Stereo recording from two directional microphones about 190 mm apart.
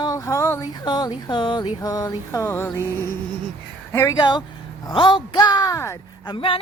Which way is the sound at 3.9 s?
15° left (ahead or behind).